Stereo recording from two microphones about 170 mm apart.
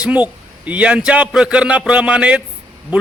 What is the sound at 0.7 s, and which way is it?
A man's voice, 5° right (ahead or behind).